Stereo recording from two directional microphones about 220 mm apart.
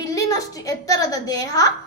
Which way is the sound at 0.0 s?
15° left (ahead or behind).